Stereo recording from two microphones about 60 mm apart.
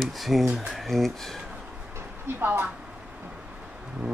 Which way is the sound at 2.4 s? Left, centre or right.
Right.